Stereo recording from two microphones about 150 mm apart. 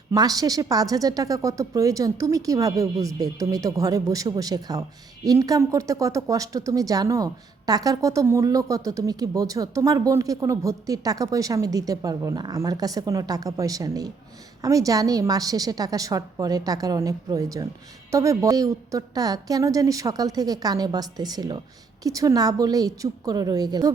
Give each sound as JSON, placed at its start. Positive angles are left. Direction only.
{"t": 0.1, "sound": "a woman's voice", "side_deg": -25}